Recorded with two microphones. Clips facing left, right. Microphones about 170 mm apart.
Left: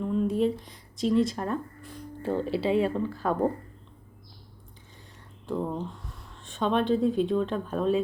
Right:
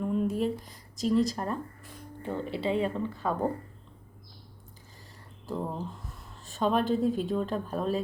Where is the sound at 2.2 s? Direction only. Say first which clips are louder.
Left 5 dB; 30° left (ahead or behind).